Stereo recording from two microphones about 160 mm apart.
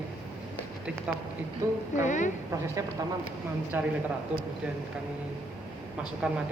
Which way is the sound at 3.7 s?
10° right (ahead or behind).